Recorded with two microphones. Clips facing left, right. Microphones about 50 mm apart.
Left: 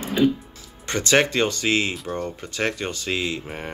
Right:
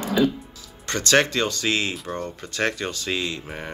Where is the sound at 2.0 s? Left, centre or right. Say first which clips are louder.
Left 2 dB; centre.